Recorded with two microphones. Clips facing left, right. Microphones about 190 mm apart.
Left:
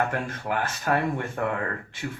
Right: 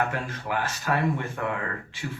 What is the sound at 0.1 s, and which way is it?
Speech, 55° left (ahead or behind).